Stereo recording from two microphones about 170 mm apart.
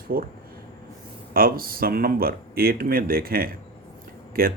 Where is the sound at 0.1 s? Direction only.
60° right (ahead or behind).